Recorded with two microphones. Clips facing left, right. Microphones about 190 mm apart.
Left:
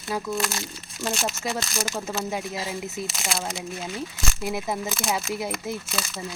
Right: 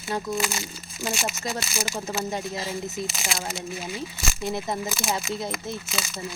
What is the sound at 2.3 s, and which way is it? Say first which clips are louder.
Speech: even; 5° left (ahead or behind).